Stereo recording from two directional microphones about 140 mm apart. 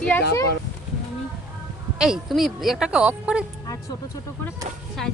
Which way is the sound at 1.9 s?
5° right (ahead or behind).